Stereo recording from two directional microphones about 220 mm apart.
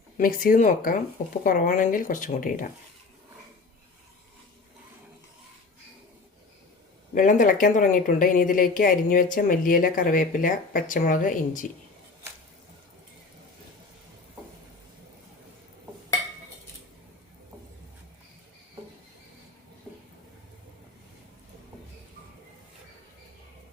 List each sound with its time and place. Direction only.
0.2 s a woman's voice: 40° left (ahead or behind)
7.1 s a woman's voice: 35° left (ahead or behind)